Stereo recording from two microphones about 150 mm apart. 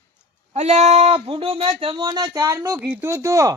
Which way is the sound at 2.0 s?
25° right (ahead or behind).